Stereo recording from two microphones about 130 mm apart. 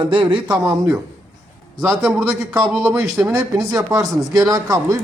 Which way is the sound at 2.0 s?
5° right (ahead or behind).